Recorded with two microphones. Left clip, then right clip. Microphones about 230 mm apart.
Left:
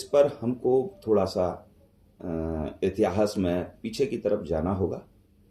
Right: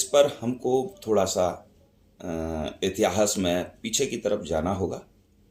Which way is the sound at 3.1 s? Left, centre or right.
Right.